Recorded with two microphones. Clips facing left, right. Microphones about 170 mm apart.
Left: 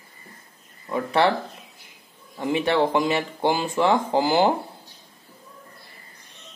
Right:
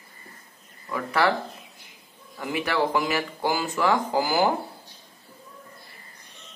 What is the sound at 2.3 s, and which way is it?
A man's voice, 25° left (ahead or behind).